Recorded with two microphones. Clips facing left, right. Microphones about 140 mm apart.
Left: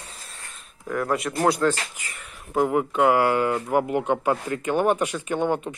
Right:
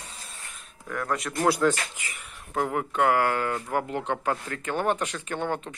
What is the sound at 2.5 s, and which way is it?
Speech, 10° left (ahead or behind).